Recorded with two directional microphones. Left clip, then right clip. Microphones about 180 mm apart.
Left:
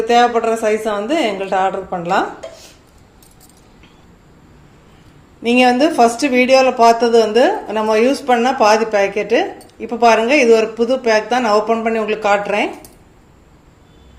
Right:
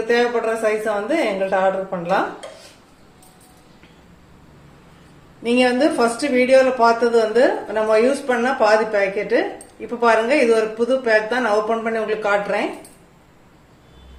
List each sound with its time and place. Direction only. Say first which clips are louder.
0.1 s speech: left 5 dB; 50° left (ahead or behind)
5.4 s speech: left 4 dB; 40° left (ahead or behind)